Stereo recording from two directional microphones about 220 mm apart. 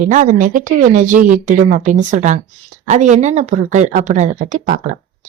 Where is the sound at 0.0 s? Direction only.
35° right (ahead or behind).